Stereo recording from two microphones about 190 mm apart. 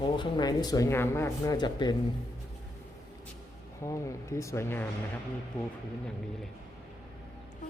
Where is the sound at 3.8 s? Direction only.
15° left (ahead or behind).